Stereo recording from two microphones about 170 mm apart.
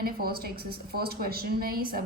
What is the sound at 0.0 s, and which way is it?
A woman's voice, 60° right (ahead or behind).